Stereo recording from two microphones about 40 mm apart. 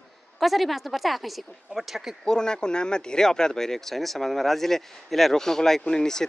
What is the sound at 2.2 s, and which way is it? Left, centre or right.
Speech, centre.